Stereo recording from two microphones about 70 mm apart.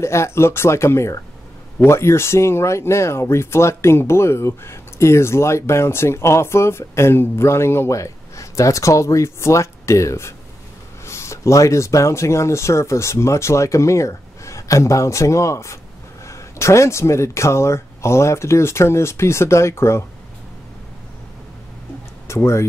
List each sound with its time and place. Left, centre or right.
0.0 s speech: left
8.0 s speech: left
22.3 s speech: left